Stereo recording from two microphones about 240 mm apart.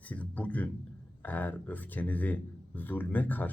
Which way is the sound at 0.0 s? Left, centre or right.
Centre.